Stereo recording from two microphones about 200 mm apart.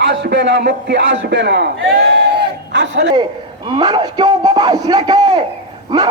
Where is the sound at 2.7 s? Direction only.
65° right (ahead or behind).